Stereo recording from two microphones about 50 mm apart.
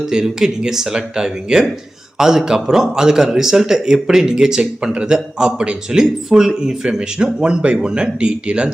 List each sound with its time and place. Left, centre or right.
0.0 s a man's voice: centre